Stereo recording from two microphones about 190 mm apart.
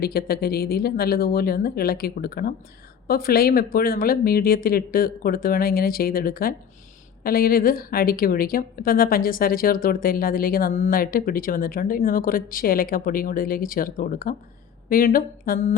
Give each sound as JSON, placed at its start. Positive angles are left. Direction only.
{"t": 0.0, "sound": "a woman's voice", "side_deg": 55}